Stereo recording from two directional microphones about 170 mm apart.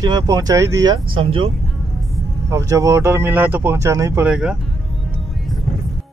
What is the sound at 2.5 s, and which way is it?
Speech, 20° right (ahead or behind).